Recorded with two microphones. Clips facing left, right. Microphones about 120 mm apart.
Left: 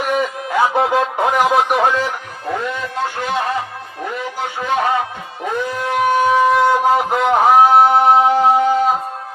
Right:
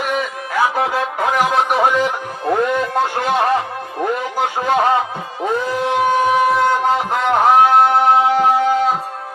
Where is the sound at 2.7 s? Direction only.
55° right (ahead or behind).